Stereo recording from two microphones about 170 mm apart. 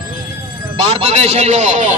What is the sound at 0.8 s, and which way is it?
A man's voice, 35° right (ahead or behind).